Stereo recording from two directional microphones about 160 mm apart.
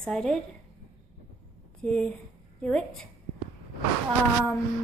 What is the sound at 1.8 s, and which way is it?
A woman's voice, 5° left (ahead or behind).